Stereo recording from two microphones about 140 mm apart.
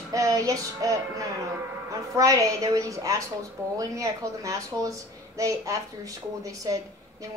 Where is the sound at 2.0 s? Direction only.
25° right (ahead or behind).